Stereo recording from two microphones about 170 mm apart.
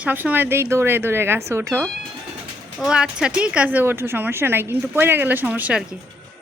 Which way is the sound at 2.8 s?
5° right (ahead or behind).